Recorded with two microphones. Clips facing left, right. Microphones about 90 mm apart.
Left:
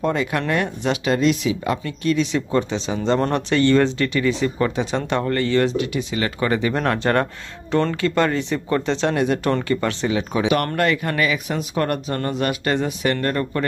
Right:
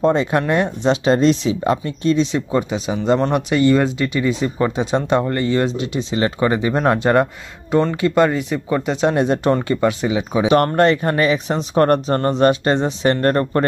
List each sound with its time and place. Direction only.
0.0 s speech: 30° right (ahead or behind); by 9.1 s 15° right (ahead or behind)
9.1 s speech: 25° right (ahead or behind)
10.5 s speech: 30° right (ahead or behind)